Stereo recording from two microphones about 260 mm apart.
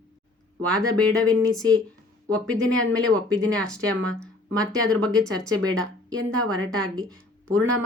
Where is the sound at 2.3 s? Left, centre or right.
Centre.